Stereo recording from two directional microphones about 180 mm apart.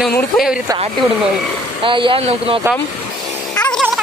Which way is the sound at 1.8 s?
30° right (ahead or behind).